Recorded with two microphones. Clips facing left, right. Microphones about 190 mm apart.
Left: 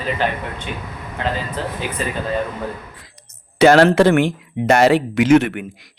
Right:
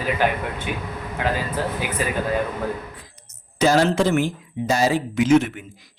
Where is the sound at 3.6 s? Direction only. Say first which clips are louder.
Left 7 dB; 65° left (ahead or behind).